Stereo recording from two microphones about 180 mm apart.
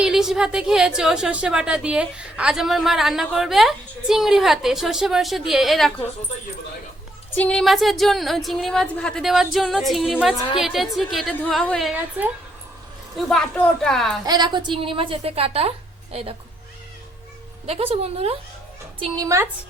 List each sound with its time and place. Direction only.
0.0 s a woman's voice: 5° right (ahead or behind)
7.3 s a woman's voice: 10° left (ahead or behind)
14.3 s a woman's voice: 25° right (ahead or behind)
17.7 s a woman's voice: 35° right (ahead or behind); by 19.5 s 20° right (ahead or behind)